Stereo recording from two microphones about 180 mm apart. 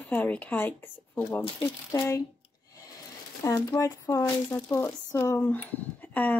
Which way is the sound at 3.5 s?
20° left (ahead or behind).